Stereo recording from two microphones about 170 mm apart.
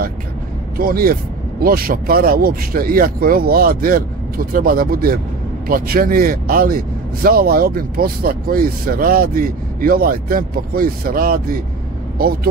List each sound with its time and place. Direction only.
0.7 s speech: 60° right (ahead or behind)